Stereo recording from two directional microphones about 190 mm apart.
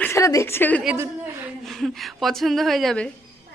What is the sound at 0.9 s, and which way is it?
Speech, 15° right (ahead or behind).